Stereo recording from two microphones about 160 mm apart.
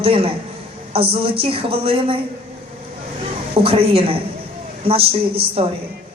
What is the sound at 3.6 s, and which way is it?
Speech, 35° right (ahead or behind).